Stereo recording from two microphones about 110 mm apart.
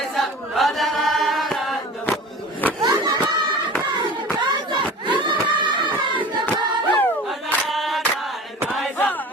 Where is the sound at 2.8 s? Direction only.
40° right (ahead or behind).